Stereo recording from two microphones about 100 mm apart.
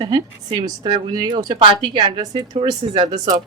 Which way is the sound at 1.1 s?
45° right (ahead or behind).